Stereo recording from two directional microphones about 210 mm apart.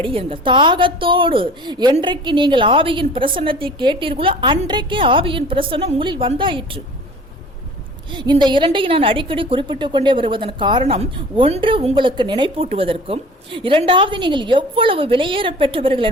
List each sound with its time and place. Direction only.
0.0 s a woman's voice: 25° right (ahead or behind)
8.1 s a woman's voice: 20° right (ahead or behind)